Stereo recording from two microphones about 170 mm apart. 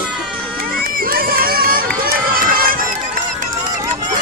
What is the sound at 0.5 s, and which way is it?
Crowd, 60° right (ahead or behind).